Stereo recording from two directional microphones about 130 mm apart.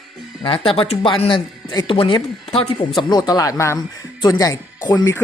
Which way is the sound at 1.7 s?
30° left (ahead or behind).